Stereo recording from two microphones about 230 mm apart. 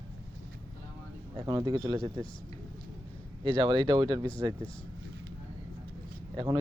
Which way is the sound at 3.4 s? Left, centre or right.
Centre.